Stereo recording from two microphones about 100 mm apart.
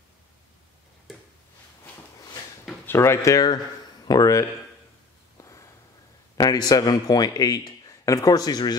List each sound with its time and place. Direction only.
2.9 s speech: 25° left (ahead or behind)
5.4 s a sound: 35° left (ahead or behind)
6.3 s a man's voice: 40° left (ahead or behind)